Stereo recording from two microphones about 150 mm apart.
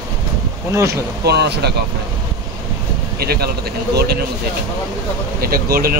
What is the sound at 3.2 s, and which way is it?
Speech, 90° right.